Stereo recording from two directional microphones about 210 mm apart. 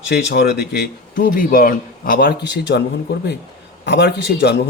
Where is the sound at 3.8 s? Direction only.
55° left (ahead or behind).